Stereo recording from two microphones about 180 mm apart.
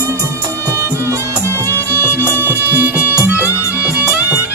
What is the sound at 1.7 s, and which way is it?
Music, 10° right (ahead or behind).